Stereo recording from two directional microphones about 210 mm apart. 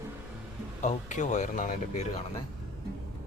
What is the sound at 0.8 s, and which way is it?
Speech, 35° left (ahead or behind).